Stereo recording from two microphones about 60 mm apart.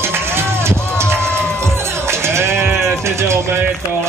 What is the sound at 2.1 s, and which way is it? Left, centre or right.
Sheep, right.